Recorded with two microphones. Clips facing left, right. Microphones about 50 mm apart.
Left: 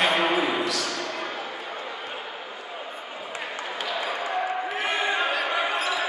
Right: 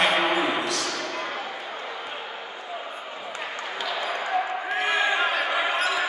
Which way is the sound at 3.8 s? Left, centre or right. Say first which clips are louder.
Right 1 dB; centre.